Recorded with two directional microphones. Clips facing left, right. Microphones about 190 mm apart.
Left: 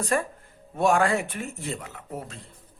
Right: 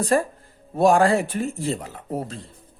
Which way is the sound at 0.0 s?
35° right (ahead or behind).